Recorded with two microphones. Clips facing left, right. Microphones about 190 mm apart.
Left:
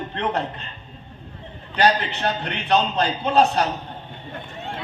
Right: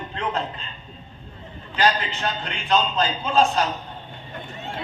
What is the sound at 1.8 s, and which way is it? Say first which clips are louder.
A man's voice: left 2 dB; 60° left (ahead or behind).